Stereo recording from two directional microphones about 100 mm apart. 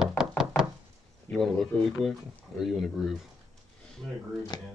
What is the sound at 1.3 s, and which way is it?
Speech, centre (ahead or behind).